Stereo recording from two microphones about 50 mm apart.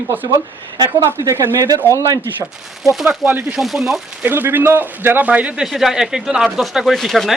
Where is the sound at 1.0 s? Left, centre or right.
Right.